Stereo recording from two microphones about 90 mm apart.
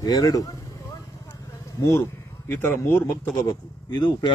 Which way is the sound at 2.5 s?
30° left (ahead or behind).